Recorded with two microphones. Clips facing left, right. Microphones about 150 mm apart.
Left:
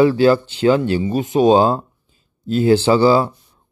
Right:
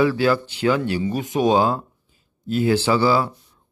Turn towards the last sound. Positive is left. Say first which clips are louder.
# left 5 dB
turn(degrees=25)  # may be behind; listen again after turning